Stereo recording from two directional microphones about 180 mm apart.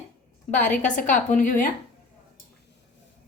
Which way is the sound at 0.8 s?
45° left (ahead or behind).